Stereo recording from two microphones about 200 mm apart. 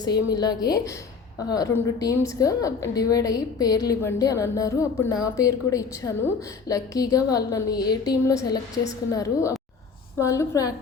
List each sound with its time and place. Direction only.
0.0 s a woman's voice: 20° left (ahead or behind)
10.2 s a woman's voice: 15° left (ahead or behind)